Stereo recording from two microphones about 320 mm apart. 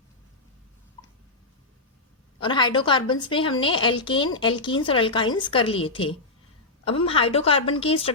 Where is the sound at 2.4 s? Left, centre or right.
Centre.